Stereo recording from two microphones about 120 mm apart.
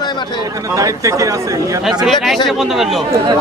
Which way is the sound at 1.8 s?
5° right (ahead or behind).